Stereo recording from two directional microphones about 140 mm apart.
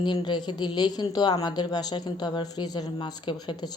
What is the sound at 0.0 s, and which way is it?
A woman's voice, 30° left (ahead or behind).